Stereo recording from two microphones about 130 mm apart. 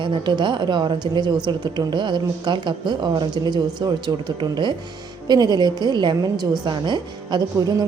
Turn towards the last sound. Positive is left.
turn(degrees=-35)  # may be behind; listen again after turning